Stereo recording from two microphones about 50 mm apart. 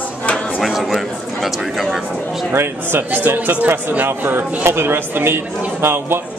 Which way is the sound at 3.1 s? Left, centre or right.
Right.